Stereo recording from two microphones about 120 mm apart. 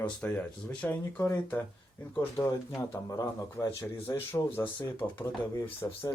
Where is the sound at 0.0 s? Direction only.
10° left (ahead or behind).